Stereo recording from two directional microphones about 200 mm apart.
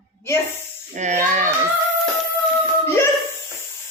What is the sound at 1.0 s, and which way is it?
Speech, 40° right (ahead or behind).